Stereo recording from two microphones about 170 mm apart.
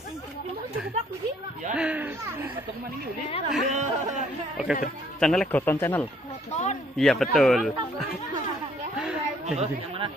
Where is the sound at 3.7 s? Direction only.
45° right (ahead or behind).